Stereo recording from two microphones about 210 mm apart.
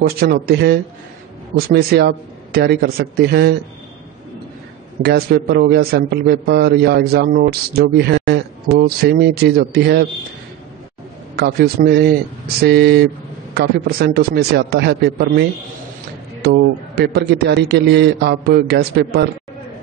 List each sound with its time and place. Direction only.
0.2 s a man's voice: 45° right (ahead or behind)
5.0 s a man's voice: 50° right (ahead or behind)
11.3 s a man's voice: 50° right (ahead or behind)
16.4 s a man's voice: 50° right (ahead or behind)